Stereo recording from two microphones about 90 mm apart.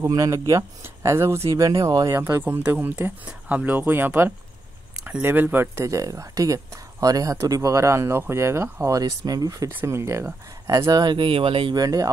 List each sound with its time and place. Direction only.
0.1 s speech: 40° right (ahead or behind)
2.1 s speech: 30° right (ahead or behind)
9.7 s speech: 25° right (ahead or behind)
10.9 s speech: 50° right (ahead or behind)
11.1 s speech: 80° right
11.7 s speech: 45° right (ahead or behind)